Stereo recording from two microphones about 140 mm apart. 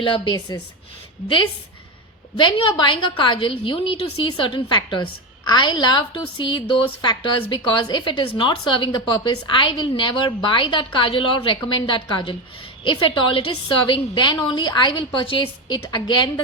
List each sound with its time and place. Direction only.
0.0 s a woman's voice: 35° left (ahead or behind)
2.4 s a woman's voice: 35° left (ahead or behind)